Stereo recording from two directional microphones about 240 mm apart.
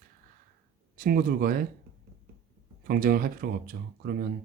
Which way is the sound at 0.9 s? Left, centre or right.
Right.